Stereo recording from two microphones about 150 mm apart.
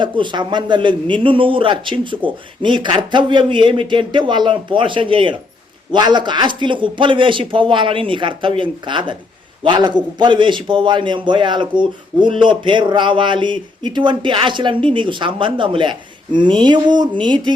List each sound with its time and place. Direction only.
0.0 s a man's voice: 30° right (ahead or behind)